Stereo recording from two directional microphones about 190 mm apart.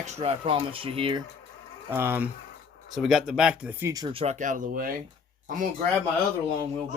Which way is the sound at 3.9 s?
25° right (ahead or behind).